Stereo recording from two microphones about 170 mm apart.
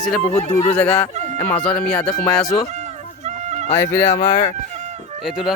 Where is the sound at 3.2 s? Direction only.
40° right (ahead or behind).